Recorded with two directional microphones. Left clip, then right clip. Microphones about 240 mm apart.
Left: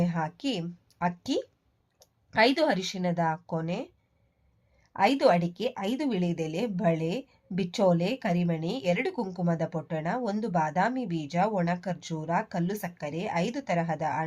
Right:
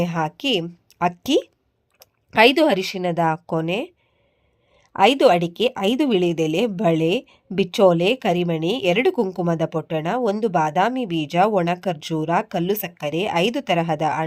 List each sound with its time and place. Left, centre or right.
0.0 s a woman's voice: right